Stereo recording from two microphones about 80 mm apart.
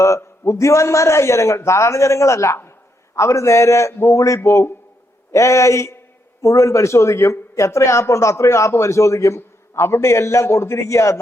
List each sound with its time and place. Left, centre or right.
0.0 s speech: left